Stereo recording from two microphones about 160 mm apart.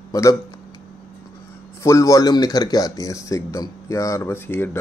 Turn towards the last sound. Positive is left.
turn(degrees=15)  # may be behind; listen again after turning